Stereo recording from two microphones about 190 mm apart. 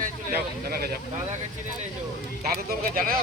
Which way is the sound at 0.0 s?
50° right (ahead or behind).